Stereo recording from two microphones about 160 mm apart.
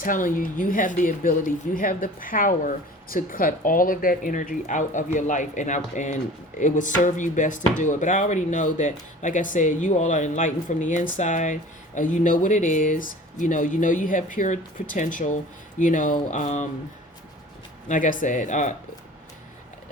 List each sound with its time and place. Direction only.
0.0 s speech: 55° left (ahead or behind)
17.8 s speech: 55° left (ahead or behind)